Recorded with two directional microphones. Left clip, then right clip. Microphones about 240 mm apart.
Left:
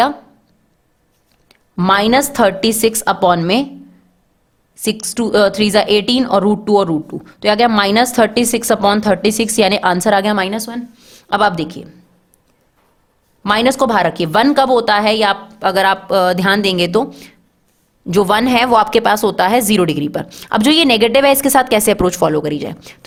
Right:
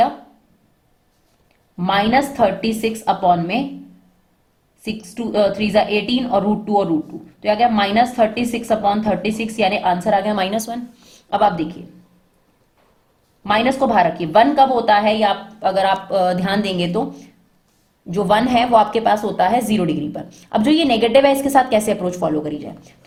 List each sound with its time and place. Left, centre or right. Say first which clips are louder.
1.5 s speech: left 7 dB; left
4.8 s speech: left 9 dB; left
10.3 s a woman's voice: left 2 dB; left
11.3 s speech: left 2 dB; left
13.4 s speech: left 3 dB; left